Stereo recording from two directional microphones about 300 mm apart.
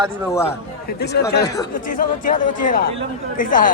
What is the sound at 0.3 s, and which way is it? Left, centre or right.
Speech, centre.